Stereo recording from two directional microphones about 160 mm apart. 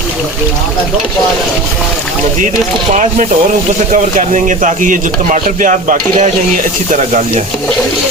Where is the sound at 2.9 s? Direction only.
50° right (ahead or behind).